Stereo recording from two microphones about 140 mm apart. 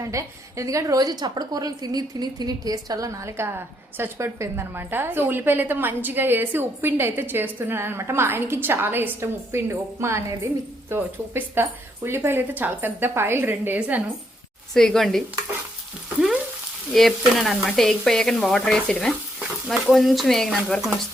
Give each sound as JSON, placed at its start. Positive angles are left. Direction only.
{"t": 0.0, "sound": "a woman's voice", "side_deg": -20}
{"t": 14.7, "sound": "speech", "side_deg": 5}
{"t": 16.9, "sound": "speech", "side_deg": 0}